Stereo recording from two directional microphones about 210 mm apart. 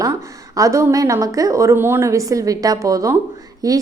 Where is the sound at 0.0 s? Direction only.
15° right (ahead or behind).